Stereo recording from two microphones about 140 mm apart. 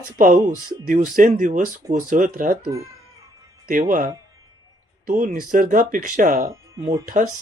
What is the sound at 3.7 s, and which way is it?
Speech, 70° right (ahead or behind).